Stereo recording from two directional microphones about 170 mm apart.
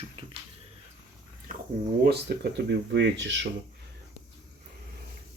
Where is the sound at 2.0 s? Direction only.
75° right (ahead or behind); by 3.5 s 90° right.